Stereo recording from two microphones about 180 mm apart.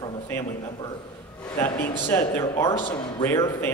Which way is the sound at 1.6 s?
15° left (ahead or behind).